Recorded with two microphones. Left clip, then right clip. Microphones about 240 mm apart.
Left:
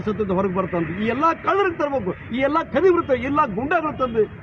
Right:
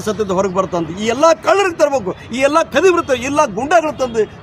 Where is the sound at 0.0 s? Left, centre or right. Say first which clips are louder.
Right 6 dB; right.